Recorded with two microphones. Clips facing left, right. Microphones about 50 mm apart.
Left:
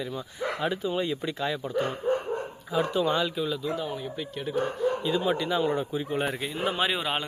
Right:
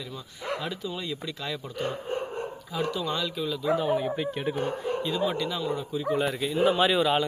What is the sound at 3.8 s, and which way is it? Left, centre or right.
Speech, right.